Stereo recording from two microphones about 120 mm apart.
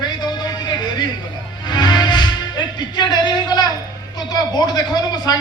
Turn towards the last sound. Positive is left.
turn(degrees=35)  # may be behind; listen again after turning